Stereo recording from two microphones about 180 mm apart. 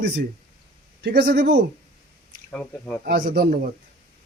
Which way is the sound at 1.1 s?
65° right (ahead or behind).